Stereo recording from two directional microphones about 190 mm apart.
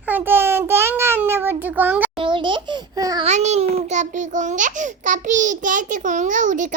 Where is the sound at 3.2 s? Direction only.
35° right (ahead or behind).